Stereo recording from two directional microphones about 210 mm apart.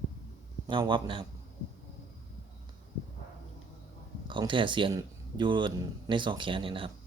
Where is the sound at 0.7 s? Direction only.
25° right (ahead or behind).